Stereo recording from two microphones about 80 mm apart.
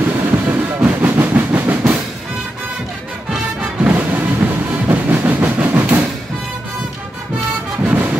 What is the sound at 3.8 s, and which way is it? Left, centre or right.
Train, right.